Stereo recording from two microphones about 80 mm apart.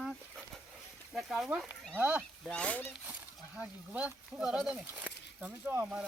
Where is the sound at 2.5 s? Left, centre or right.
Centre.